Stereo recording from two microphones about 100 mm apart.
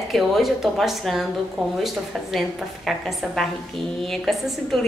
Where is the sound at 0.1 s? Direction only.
Centre (ahead or behind).